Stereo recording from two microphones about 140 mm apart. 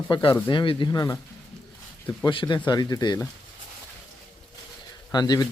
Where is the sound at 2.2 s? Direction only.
35° left (ahead or behind).